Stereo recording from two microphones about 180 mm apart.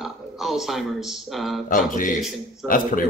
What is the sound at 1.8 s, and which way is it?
Speech, 50° left (ahead or behind).